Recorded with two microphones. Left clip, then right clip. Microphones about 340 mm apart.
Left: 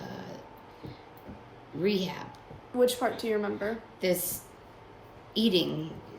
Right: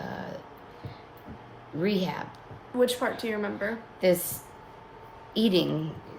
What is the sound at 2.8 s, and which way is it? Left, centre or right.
Speech, centre.